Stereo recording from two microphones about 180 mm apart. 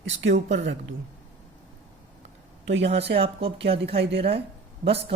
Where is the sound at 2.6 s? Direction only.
85° right.